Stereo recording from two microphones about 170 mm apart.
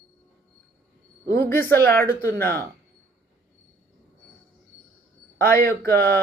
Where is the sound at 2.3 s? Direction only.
65° right (ahead or behind).